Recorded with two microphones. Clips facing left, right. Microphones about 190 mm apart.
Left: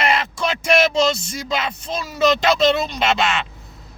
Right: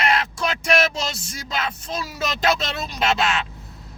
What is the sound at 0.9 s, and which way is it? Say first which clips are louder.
Music: left 11 dB; 90° left.